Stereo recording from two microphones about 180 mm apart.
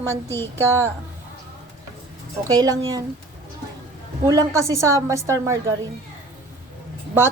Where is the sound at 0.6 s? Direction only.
15° right (ahead or behind).